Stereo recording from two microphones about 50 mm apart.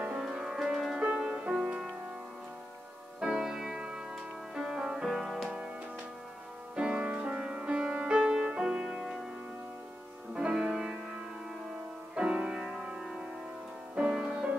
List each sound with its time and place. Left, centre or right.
0.2 s music: centre
0.9 s music: centre
3.2 s music: centre
6.7 s music: centre
10.3 s music: centre
12.2 s music: centre
13.9 s music: centre